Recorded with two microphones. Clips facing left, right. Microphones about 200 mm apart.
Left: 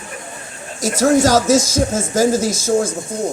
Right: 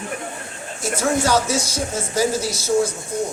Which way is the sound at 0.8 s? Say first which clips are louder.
Left 7 dB; 40° left (ahead or behind).